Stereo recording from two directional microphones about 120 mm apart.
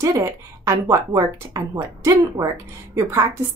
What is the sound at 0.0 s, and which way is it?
Speech, 25° right (ahead or behind).